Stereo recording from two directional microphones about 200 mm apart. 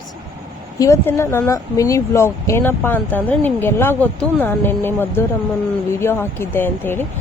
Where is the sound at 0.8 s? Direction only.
15° left (ahead or behind).